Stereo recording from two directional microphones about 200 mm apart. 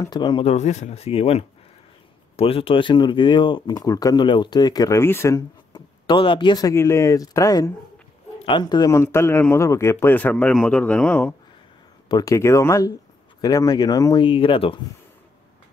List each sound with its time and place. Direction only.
0.0 s a man's voice: 20° left (ahead or behind)
12.1 s a man's voice: 20° left (ahead or behind)